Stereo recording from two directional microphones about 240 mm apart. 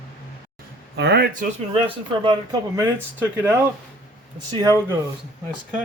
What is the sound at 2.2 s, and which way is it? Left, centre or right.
Speech, centre.